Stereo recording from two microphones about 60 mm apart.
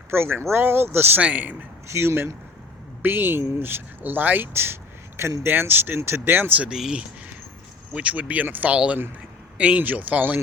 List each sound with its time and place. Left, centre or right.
0.1 s speech: right
1.2 s speech: right
1.9 s speech: right
7.9 s speech: right